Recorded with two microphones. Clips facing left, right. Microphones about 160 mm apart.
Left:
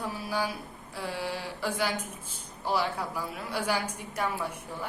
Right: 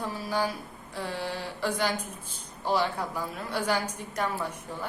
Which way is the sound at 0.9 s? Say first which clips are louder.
Right 1 dB; 10° left (ahead or behind).